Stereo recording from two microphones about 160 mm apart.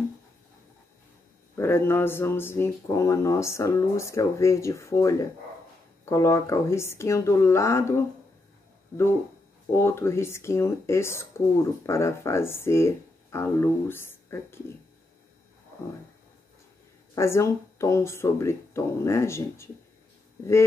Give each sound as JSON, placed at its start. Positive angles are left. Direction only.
{"t": 1.6, "sound": "speech", "side_deg": 15}
{"t": 9.7, "sound": "speech", "side_deg": 15}
{"t": 17.1, "sound": "speech", "side_deg": 15}